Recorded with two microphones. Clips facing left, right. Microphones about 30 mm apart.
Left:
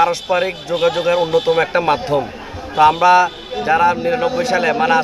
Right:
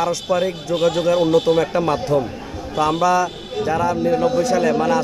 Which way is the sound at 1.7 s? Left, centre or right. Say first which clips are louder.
Left 3 dB; left.